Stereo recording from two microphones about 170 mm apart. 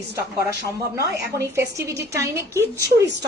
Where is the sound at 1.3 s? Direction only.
20° right (ahead or behind).